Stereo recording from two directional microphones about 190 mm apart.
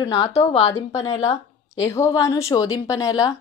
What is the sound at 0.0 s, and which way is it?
Speech, 25° left (ahead or behind).